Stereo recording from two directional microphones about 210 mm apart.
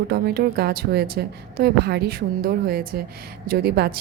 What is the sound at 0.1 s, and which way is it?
A woman's voice, 50° right (ahead or behind).